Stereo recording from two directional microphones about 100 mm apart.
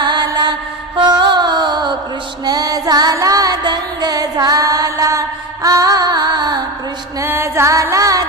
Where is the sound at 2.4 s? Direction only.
40° right (ahead or behind).